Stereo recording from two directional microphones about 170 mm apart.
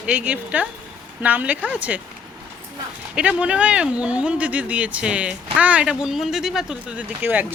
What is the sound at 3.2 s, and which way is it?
Speech, 5° right (ahead or behind).